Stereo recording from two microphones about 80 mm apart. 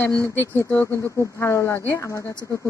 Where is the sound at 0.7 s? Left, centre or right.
Left.